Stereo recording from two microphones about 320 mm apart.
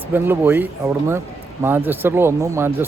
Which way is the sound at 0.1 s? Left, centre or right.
Centre.